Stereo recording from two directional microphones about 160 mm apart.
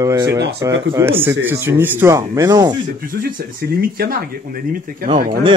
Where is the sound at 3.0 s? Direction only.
65° right (ahead or behind).